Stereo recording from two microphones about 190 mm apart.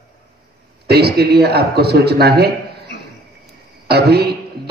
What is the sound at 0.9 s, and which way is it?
A man's voice, 55° right (ahead or behind).